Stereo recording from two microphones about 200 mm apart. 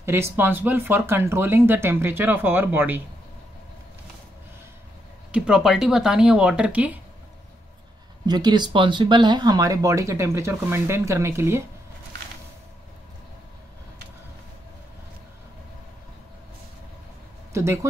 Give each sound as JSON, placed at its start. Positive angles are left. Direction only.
{"t": 0.0, "sound": "speech", "side_deg": -10}
{"t": 5.3, "sound": "speech", "side_deg": -5}
{"t": 8.3, "sound": "speech", "side_deg": -20}
{"t": 17.5, "sound": "a sound", "side_deg": -15}